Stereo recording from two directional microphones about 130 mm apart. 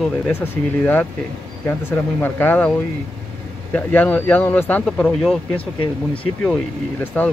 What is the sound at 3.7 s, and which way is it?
Speech, 10° left (ahead or behind).